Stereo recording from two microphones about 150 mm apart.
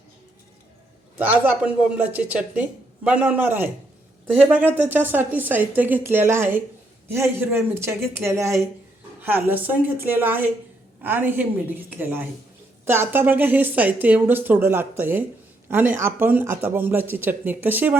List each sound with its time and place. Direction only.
1.2 s speech: 10° right (ahead or behind)